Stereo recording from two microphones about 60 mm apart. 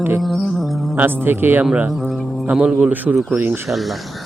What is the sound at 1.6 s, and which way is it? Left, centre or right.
Speech, right.